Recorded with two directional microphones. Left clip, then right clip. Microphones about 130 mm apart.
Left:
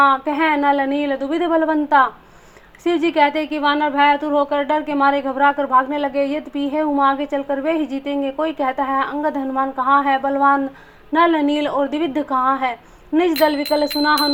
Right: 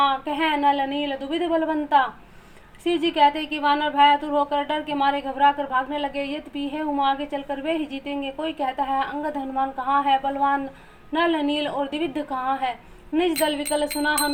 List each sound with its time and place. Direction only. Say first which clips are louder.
0.0 s a woman's voice: left 6 dB; 30° left (ahead or behind)